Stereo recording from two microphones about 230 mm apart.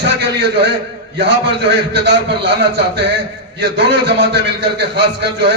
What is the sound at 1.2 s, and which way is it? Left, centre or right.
A man's voice, right.